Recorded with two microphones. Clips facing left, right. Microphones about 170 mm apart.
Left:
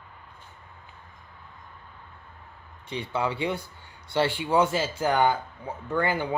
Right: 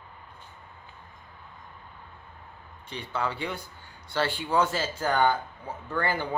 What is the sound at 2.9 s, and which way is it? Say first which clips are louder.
Speech: left 3 dB; 25° left (ahead or behind).